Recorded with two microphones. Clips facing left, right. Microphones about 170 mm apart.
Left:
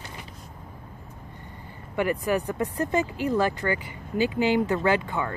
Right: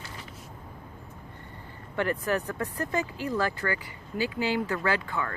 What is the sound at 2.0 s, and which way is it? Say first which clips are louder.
Speech: left 3 dB; 15° left (ahead or behind).